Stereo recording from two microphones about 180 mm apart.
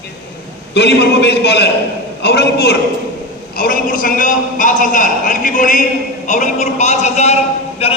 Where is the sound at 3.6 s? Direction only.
50° left (ahead or behind).